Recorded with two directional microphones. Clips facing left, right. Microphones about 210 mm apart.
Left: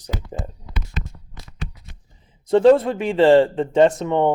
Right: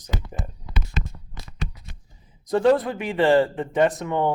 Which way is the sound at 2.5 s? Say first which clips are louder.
Left 5 dB; 25° left (ahead or behind).